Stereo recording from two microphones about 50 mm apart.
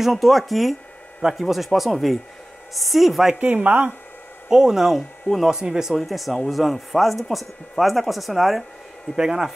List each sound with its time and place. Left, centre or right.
0.0 s speech: centre
3.3 s speech: right
4.5 s speech: centre
5.9 s speech: centre
9.1 s speech: centre